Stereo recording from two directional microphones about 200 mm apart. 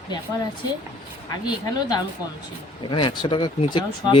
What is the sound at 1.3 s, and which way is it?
A woman's voice, 20° left (ahead or behind).